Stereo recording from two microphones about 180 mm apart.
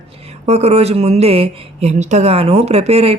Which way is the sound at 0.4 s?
35° right (ahead or behind).